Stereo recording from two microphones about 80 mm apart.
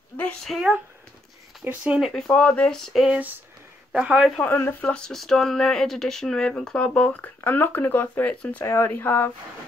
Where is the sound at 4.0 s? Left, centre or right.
Centre.